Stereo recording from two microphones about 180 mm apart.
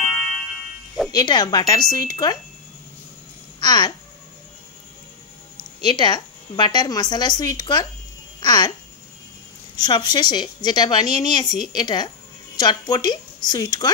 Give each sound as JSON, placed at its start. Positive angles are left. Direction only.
{"t": 1.1, "sound": "speech", "side_deg": 25}
{"t": 3.5, "sound": "speech", "side_deg": 25}
{"t": 5.9, "sound": "speech", "side_deg": 25}
{"t": 9.8, "sound": "a woman's voice", "side_deg": 20}